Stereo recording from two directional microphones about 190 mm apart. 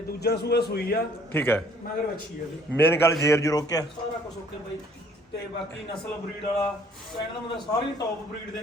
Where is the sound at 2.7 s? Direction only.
10° left (ahead or behind).